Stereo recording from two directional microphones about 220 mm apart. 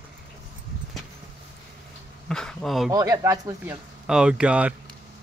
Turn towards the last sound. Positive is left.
turn(degrees=-5)  # may be behind; listen again after turning